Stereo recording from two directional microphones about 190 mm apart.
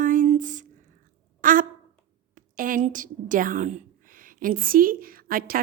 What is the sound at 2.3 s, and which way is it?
A woman's voice, 45° right (ahead or behind).